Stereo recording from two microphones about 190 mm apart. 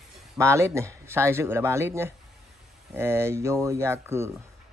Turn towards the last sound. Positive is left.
turn(degrees=-15)  # may be behind; listen again after turning